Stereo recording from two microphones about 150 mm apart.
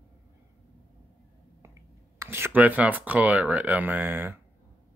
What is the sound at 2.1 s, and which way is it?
Speech, 15° right (ahead or behind).